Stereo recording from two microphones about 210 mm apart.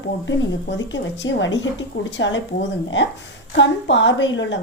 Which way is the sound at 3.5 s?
60° left (ahead or behind).